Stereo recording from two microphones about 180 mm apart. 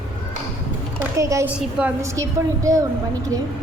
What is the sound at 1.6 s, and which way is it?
Speech, 5° right (ahead or behind).